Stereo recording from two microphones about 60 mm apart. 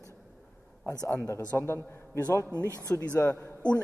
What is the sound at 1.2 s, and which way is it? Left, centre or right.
Speech, left.